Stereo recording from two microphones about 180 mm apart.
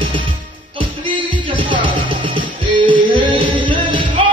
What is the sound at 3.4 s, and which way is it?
Music, 30° right (ahead or behind).